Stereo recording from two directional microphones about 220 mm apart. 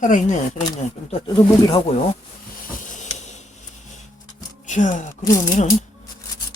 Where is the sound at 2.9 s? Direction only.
30° left (ahead or behind).